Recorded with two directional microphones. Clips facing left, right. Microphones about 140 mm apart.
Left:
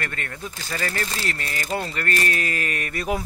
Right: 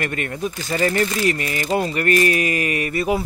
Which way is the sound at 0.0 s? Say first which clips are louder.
Right 8 dB; 20° right (ahead or behind).